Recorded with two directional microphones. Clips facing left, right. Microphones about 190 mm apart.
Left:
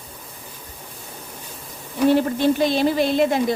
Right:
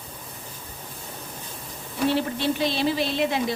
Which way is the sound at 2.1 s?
45° left (ahead or behind).